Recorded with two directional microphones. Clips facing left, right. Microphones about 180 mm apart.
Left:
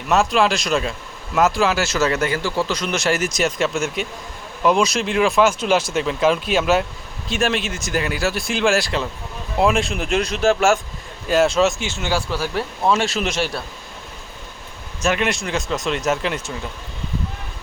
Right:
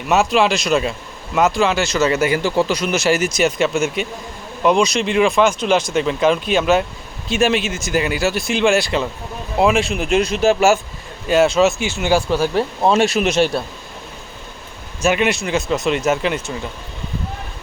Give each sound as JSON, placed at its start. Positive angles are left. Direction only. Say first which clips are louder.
{"t": 0.1, "sound": "speech", "louder": "right 2 dB", "side_deg": -5}
{"t": 15.0, "sound": "speech", "louder": "right 4 dB", "side_deg": -5}